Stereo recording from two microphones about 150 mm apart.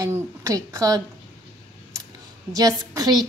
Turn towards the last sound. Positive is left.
turn(degrees=-25)  # may be behind; listen again after turning